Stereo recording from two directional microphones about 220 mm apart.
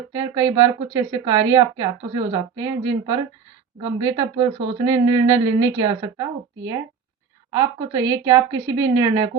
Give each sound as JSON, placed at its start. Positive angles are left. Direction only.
{"t": 0.2, "sound": "speech", "side_deg": -15}